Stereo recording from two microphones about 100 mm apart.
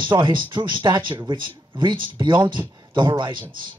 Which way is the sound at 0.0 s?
55° right (ahead or behind).